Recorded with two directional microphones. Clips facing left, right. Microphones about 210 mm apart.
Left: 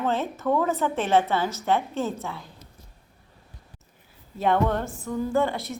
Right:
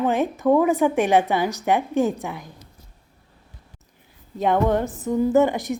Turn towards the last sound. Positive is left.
turn(degrees=-15)  # may be behind; listen again after turning